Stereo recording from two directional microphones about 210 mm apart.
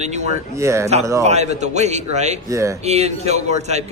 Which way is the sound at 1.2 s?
30° right (ahead or behind).